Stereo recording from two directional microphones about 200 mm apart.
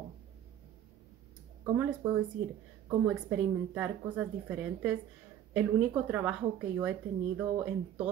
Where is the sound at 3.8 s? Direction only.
5° right (ahead or behind).